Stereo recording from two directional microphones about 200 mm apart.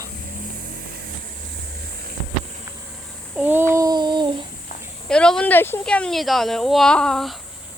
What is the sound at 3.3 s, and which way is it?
Child singing, 10° right (ahead or behind).